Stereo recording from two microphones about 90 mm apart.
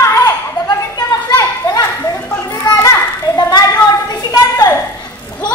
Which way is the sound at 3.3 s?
45° left (ahead or behind).